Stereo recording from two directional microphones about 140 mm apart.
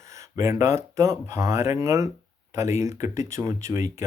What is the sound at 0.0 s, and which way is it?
Speech, 20° right (ahead or behind).